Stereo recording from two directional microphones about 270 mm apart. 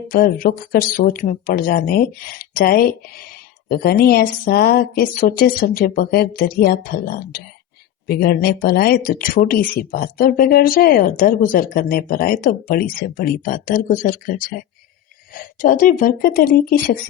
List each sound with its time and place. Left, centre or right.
0.1 s speech: left